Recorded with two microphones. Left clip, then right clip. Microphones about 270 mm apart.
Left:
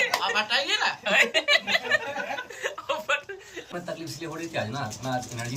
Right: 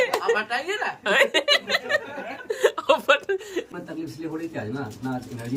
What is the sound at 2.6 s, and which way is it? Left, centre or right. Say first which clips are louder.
Chuckle: right 9 dB; right.